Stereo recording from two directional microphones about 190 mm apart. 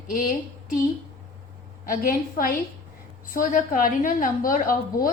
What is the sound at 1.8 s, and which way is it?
A woman's voice, 50° left (ahead or behind).